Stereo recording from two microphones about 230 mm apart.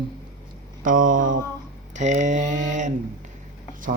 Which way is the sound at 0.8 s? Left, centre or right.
Right.